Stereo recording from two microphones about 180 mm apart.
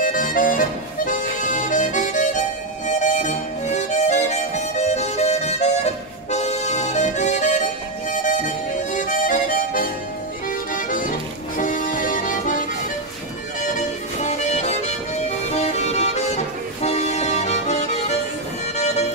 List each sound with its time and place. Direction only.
0.0 s music: 50° left (ahead or behind)
2.9 s harmonica: 40° left (ahead or behind)
6.3 s music: 40° left (ahead or behind)
8.1 s harmonica: 45° left (ahead or behind)
10.7 s music: 50° left (ahead or behind)
13.7 s music: 40° left (ahead or behind)